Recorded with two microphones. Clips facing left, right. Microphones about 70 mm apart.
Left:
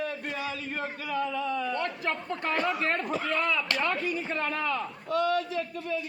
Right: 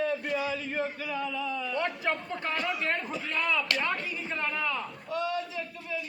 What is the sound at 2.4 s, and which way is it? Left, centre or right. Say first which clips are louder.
Speech: left 4 dB; left.